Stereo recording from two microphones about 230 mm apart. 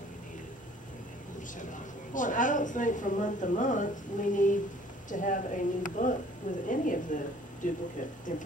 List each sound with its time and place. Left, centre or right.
1.6 s a woman's voice: left